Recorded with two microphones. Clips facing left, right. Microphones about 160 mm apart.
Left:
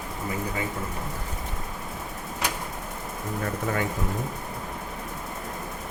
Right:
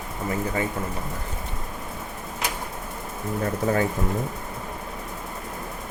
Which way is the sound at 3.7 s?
35° right (ahead or behind).